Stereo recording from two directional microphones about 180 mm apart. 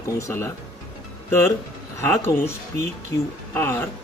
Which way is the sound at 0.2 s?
15° left (ahead or behind).